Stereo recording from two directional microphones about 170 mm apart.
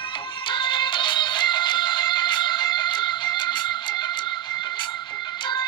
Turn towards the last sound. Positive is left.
turn(degrees=25)  # may be behind; listen again after turning